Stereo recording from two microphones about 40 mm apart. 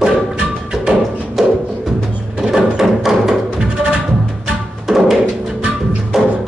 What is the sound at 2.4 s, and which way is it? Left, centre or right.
Music, centre.